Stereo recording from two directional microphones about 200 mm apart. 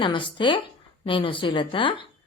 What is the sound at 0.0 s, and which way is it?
Speech, 25° left (ahead or behind).